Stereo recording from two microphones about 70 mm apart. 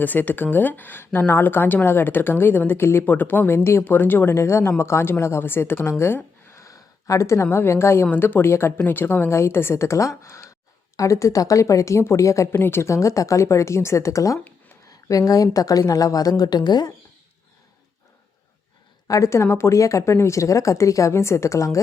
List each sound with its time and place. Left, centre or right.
0.0 s a woman's voice: left
6.6 s a sound: left
7.5 s a woman's voice: left
8.1 s a woman's voice: left
12.5 s a woman's voice: left
16.4 s speech: left
19.0 s a woman's voice: left